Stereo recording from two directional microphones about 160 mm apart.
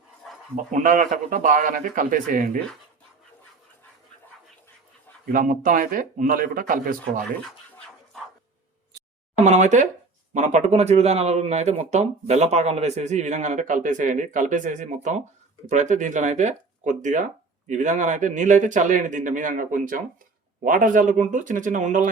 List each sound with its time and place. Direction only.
0.5 s speech: 55° right (ahead or behind)
5.2 s speech: 55° right (ahead or behind)
7.4 s scratching: centre (ahead or behind)
9.4 s speech: 45° right (ahead or behind)